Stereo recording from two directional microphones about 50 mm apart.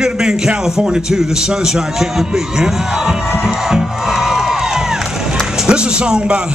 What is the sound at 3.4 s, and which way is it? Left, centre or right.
Music, centre.